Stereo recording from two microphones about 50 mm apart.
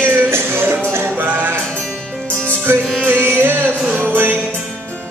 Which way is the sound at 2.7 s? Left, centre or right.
Right.